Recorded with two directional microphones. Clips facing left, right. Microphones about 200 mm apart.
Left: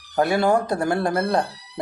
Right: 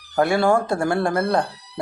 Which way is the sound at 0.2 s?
20° left (ahead or behind).